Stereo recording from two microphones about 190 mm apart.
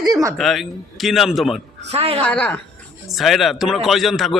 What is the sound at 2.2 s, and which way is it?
A man's voice, 5° left (ahead or behind).